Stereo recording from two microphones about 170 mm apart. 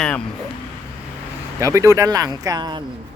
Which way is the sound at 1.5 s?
15° right (ahead or behind).